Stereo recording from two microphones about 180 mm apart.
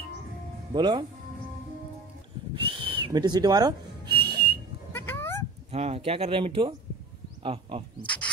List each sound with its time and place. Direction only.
0.7 s speech: 25° right (ahead or behind)
2.8 s whistling: 30° right (ahead or behind)
4.9 s a sound: 10° left (ahead or behind)
5.7 s speech: 35° right (ahead or behind)